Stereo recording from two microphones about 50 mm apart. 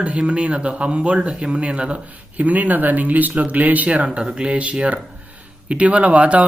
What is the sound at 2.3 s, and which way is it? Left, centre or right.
Speech, right.